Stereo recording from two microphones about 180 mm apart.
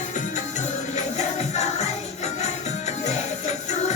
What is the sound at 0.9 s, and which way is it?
Music, 40° left (ahead or behind).